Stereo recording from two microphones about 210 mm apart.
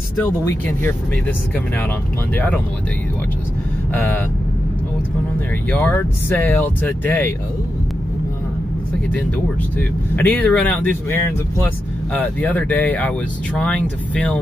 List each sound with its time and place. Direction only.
2.3 s speech: 10° left (ahead or behind)
3.9 s speech: 10° left (ahead or behind)
5.7 s speech: 10° left (ahead or behind)
9.8 s speech: 10° left (ahead or behind)